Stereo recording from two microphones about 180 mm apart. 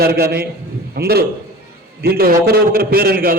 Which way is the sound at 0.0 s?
60° right (ahead or behind).